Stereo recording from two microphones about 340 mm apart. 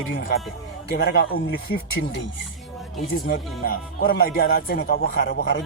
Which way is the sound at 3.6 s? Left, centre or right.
Left.